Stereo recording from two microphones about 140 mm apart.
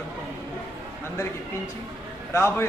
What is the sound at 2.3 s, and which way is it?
Speech, 15° left (ahead or behind).